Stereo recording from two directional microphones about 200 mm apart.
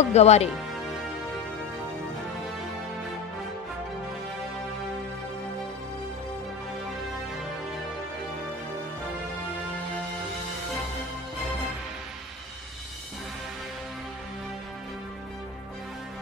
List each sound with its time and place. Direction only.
0.0 s speech: 35° left (ahead or behind)